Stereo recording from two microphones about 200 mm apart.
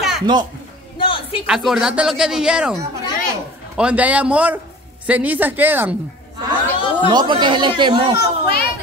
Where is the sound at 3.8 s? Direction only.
5° right (ahead or behind).